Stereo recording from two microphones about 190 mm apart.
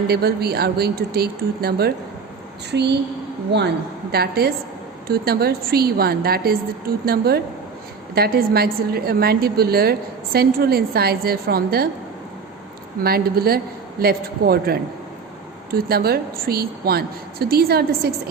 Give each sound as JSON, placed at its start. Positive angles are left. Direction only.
{"t": 0.1, "sound": "a woman's voice", "side_deg": -55}
{"t": 4.1, "sound": "a woman's voice", "side_deg": -55}
{"t": 13.0, "sound": "a woman's voice", "side_deg": -55}